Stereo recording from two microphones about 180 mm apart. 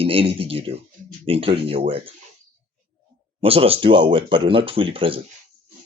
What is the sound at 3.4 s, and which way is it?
Speech, 30° right (ahead or behind).